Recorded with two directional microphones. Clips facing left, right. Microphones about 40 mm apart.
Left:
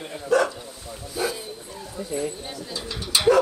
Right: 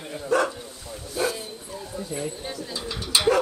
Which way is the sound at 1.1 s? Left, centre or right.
Centre.